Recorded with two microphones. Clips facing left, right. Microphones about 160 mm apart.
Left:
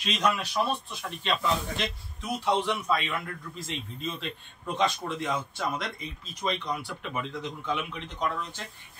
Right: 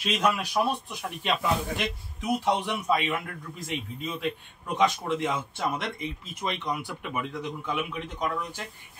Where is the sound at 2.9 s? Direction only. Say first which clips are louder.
Right 2 dB; 15° right (ahead or behind).